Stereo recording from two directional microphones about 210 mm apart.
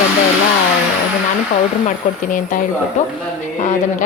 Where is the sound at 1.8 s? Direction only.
40° left (ahead or behind).